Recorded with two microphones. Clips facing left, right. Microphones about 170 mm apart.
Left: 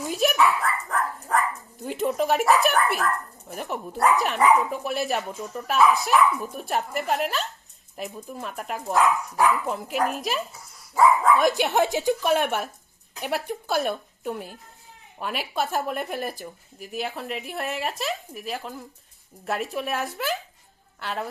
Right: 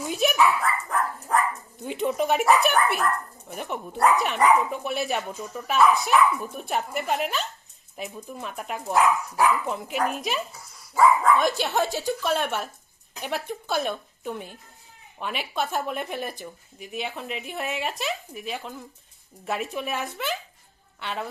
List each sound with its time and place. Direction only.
0.0 s dog: centre (ahead or behind)
3.5 s speech: centre (ahead or behind)
11.4 s a woman's voice: 15° left (ahead or behind)
13.1 s speech: centre (ahead or behind)